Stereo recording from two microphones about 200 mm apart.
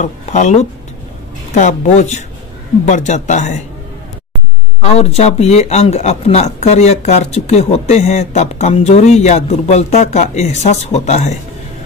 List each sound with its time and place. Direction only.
0.0 s speech: 35° left (ahead or behind)
4.8 s speech: 30° left (ahead or behind)